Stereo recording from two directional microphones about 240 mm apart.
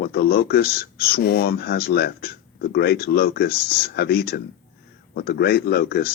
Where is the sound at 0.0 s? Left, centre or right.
Left.